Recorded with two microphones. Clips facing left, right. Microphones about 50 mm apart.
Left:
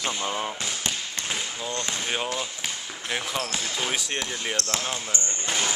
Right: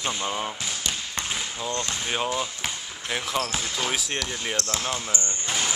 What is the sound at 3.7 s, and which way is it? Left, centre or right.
Speech, centre.